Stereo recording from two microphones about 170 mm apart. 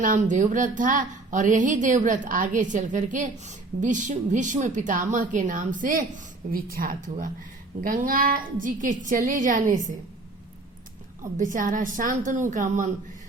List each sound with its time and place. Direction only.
0.0 s a woman's voice: 50° right (ahead or behind)
11.2 s a woman's voice: 50° right (ahead or behind)